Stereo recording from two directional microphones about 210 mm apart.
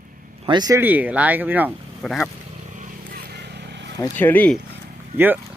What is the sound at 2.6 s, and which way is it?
Vehicle, 35° right (ahead or behind).